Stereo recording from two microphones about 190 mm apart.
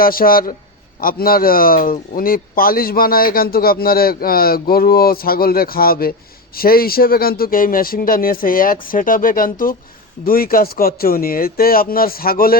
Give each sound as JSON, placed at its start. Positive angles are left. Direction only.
{"t": 0.0, "sound": "speech", "side_deg": 50}